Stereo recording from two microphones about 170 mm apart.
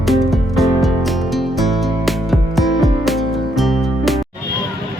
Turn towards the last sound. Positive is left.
turn(degrees=0)  # may be behind; listen again after turning